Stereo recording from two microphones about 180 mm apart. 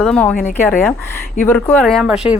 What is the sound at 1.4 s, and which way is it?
Speech, 10° left (ahead or behind).